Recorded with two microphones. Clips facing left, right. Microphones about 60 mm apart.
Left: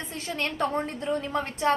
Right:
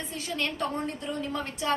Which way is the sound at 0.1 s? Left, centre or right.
Left.